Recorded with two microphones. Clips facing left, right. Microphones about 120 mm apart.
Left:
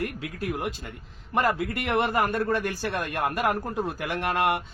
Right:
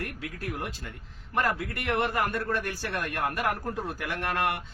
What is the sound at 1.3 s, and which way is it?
A man's voice, 20° left (ahead or behind).